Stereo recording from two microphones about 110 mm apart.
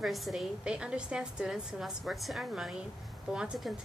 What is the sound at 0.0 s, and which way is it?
A woman's voice, centre (ahead or behind).